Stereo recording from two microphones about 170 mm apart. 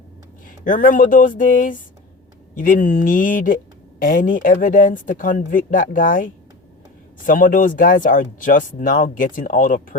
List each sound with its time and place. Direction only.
0.4 s speech: 55° left (ahead or behind)